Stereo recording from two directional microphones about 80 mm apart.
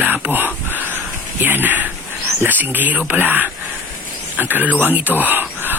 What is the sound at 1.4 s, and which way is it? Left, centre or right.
Speech, right.